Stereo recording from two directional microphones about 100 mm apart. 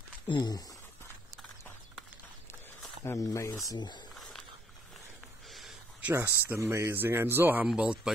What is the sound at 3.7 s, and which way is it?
Speech, 50° left (ahead or behind).